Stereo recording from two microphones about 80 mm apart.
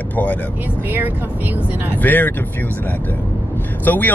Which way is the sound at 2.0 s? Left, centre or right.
Left.